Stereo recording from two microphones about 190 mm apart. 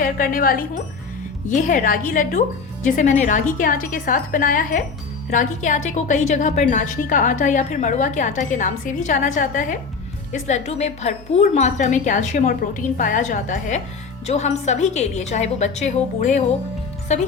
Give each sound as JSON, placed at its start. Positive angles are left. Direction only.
{"t": 0.0, "sound": "speech", "side_deg": 45}